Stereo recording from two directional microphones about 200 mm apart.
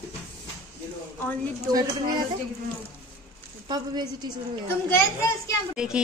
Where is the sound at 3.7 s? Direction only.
20° right (ahead or behind).